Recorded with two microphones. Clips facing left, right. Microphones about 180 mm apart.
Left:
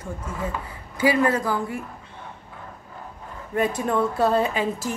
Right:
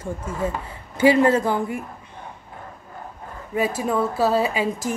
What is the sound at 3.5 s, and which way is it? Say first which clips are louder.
A woman's voice: even; 5° right (ahead or behind).